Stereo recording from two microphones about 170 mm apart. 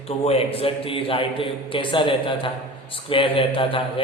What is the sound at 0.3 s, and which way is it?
A man's voice, 35° left (ahead or behind).